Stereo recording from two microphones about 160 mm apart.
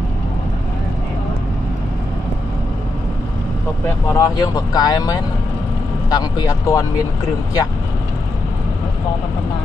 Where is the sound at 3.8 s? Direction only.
20° left (ahead or behind).